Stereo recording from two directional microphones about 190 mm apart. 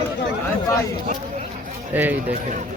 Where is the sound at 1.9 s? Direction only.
10° right (ahead or behind).